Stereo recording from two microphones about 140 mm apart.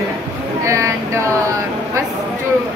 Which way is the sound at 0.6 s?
20° right (ahead or behind).